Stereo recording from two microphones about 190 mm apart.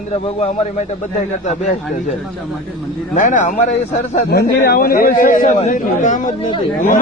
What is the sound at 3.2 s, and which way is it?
A man's voice, 40° left (ahead or behind).